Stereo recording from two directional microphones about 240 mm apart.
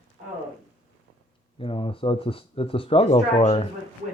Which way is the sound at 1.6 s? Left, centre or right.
Left.